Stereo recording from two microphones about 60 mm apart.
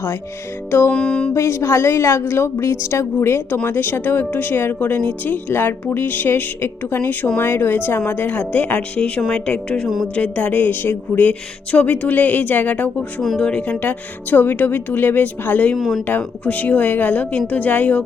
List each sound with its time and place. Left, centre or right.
0.9 s a woman's voice: centre
1.3 s a woman's voice: left
15.8 s speech: centre
16.0 s a woman's voice: left